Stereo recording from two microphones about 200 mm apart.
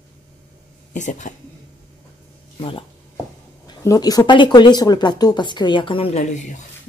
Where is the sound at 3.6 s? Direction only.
20° left (ahead or behind).